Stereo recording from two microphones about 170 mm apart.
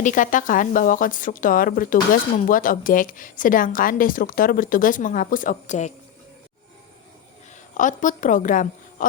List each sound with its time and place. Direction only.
0.0 s a woman's voice: 50° left (ahead or behind)
7.8 s a woman's voice: 50° left (ahead or behind)